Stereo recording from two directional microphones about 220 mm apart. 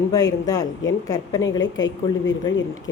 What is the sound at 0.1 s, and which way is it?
A woman's voice, 15° left (ahead or behind).